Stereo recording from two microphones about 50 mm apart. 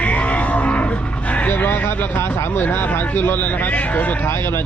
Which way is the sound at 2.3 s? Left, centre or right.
Left.